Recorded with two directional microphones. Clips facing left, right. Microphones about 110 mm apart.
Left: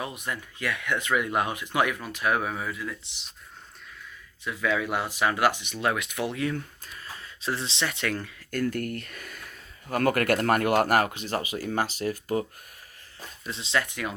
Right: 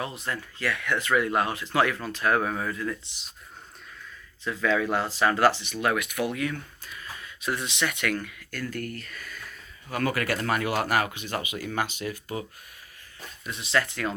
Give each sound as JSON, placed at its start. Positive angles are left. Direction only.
{"t": 0.3, "sound": "speech", "side_deg": 20}
{"t": 4.4, "sound": "speech", "side_deg": 10}
{"t": 8.4, "sound": "speech", "side_deg": 50}
{"t": 13.5, "sound": "speech", "side_deg": 25}